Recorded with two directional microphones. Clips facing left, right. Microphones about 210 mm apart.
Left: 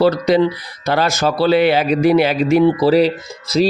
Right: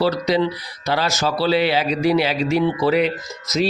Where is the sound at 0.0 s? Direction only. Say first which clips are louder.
Left 5 dB; 50° left (ahead or behind).